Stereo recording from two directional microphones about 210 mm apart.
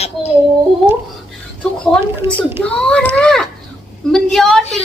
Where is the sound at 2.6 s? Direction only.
5° left (ahead or behind).